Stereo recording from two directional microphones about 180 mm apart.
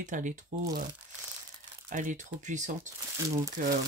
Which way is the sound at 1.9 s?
45° right (ahead or behind).